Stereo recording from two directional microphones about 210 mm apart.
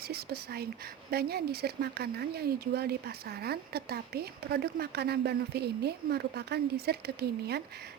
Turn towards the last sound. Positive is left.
turn(degrees=-50)  # may be behind; listen again after turning